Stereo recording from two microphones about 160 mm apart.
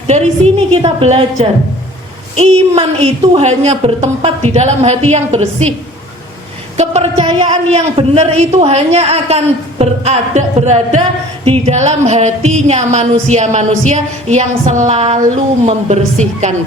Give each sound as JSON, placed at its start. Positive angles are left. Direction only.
{"t": 0.1, "sound": "a woman's voice", "side_deg": -40}
{"t": 6.7, "sound": "a woman's voice", "side_deg": -40}
{"t": 7.7, "sound": "a man's voice", "side_deg": -40}